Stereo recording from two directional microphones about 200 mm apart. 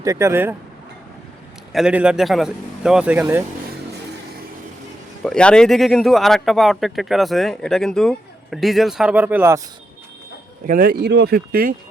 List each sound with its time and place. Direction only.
0.0 s speech: 15° right (ahead or behind)
1.7 s speech: 5° right (ahead or behind)
5.2 s speech: 5° left (ahead or behind)
10.7 s speech: 45° right (ahead or behind)